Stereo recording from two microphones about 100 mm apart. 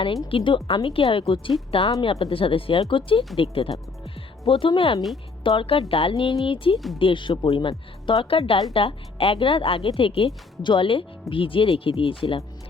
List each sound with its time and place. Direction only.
0.3 s speech: 60° left (ahead or behind)
6.7 s speech: centre (ahead or behind)
7.0 s speech: 55° left (ahead or behind)
10.6 s speech: 55° left (ahead or behind)